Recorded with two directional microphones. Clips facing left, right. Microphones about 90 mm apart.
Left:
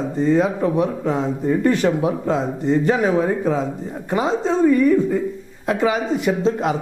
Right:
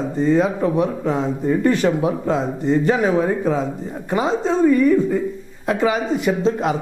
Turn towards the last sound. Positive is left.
turn(degrees=-25)  # may be behind; listen again after turning